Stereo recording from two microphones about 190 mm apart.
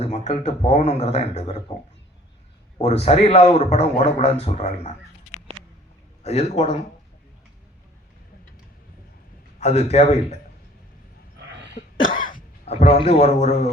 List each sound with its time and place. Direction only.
0.0 s a man's voice: 35° left (ahead or behind)
2.7 s a man's voice: 35° left (ahead or behind)
6.2 s a man's voice: 35° left (ahead or behind)
9.6 s a man's voice: 35° left (ahead or behind)
12.6 s a man's voice: 35° left (ahead or behind)